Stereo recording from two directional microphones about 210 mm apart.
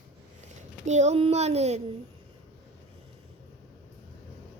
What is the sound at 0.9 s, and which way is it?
Speech, 30° right (ahead or behind).